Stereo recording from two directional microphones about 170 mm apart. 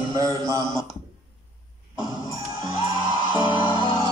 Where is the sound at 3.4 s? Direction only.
30° left (ahead or behind).